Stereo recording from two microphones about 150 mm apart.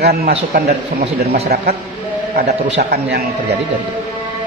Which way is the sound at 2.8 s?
90° right.